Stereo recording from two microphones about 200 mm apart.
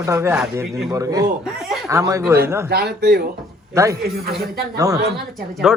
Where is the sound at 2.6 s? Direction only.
55° right (ahead or behind).